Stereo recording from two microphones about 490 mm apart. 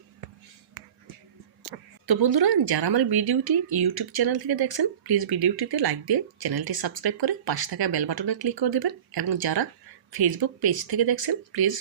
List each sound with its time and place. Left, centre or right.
2.0 s speech: right